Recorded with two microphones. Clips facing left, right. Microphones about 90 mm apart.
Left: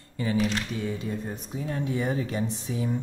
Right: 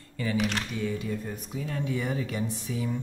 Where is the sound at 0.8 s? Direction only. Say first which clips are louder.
Even; 30° left (ahead or behind).